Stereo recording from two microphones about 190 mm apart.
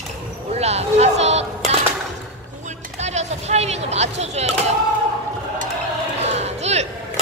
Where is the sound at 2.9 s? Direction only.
35° right (ahead or behind).